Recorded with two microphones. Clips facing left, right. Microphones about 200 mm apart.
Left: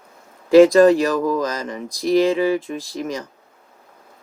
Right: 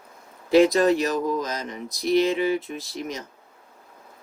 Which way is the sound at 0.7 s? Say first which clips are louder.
Left 7 dB; 90° left.